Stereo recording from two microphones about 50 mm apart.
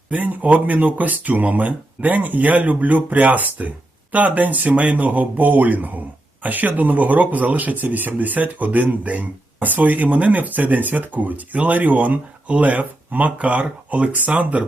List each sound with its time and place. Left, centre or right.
0.1 s speech: right